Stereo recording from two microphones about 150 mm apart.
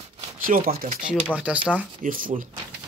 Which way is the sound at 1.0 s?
10° right (ahead or behind).